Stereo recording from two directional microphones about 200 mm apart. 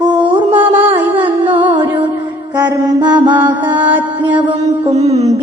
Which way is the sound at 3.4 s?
10° right (ahead or behind).